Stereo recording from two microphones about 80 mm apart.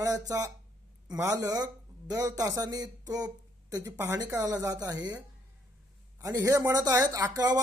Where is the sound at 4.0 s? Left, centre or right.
Right.